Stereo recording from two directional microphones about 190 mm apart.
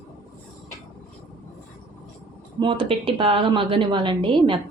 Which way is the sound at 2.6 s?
25° right (ahead or behind).